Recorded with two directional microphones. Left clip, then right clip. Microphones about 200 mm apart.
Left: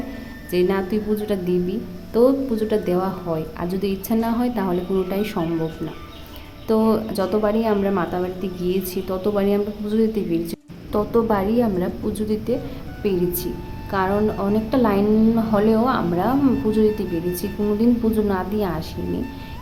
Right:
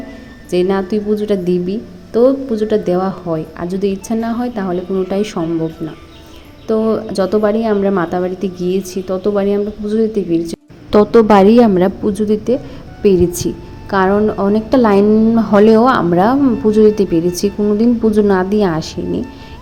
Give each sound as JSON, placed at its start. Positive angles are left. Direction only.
{"t": 0.5, "sound": "a woman's voice", "side_deg": -25}
{"t": 6.7, "sound": "a woman's voice", "side_deg": -10}
{"t": 10.9, "sound": "a woman's voice", "side_deg": -30}
{"t": 12.0, "sound": "a woman's voice", "side_deg": -20}